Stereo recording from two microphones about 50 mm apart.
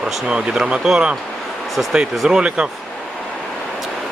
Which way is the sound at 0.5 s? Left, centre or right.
Centre.